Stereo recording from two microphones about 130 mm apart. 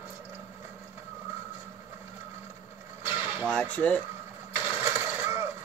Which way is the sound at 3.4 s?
10° left (ahead or behind).